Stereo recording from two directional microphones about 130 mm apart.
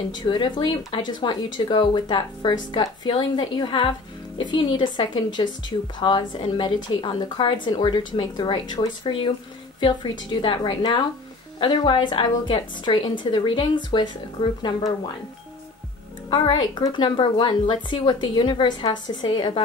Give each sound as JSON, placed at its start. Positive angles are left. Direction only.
{"t": 0.1, "sound": "a woman's voice", "side_deg": 35}
{"t": 16.3, "sound": "a woman's voice", "side_deg": 35}